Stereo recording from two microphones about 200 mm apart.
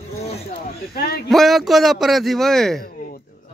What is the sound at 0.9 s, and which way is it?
Speech, 50° left (ahead or behind).